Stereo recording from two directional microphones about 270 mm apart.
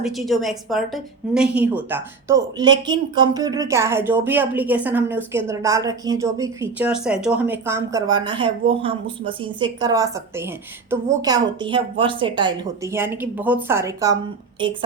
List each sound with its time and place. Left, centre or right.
0.0 s speech: centre